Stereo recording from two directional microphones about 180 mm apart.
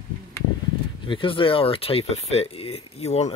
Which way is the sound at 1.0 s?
30° left (ahead or behind).